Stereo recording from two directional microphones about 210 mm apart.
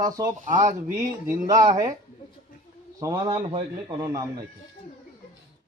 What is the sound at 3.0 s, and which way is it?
A man's voice, 15° right (ahead or behind).